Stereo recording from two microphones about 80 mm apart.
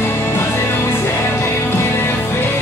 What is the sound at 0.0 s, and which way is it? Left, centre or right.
Music, left.